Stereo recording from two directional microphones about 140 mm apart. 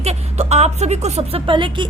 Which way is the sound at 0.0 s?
50° right (ahead or behind).